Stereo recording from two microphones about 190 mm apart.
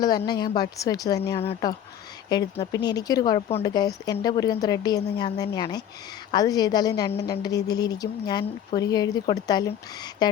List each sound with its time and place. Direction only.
0.3 s speech: 20° left (ahead or behind)